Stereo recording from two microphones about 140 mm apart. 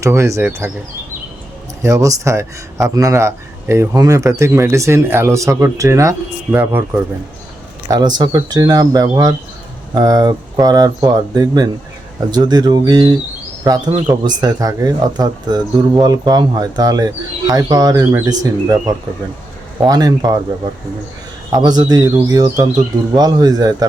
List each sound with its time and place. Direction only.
0.0 s speech: 20° right (ahead or behind)
1.8 s speech: 25° right (ahead or behind)
7.9 s speech: 30° right (ahead or behind)
21.5 s speech: 30° right (ahead or behind)